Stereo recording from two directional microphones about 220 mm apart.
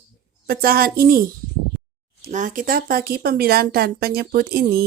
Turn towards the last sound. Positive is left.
turn(degrees=-45)  # may be behind; listen again after turning